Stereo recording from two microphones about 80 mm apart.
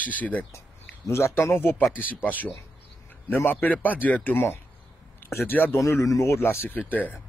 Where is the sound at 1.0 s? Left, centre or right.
Left.